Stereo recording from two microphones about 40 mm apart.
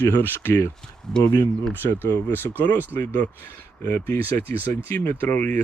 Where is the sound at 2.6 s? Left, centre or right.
Left.